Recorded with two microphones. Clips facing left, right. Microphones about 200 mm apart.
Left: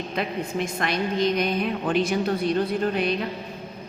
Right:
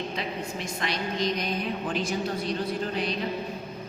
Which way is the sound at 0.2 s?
55° left (ahead or behind).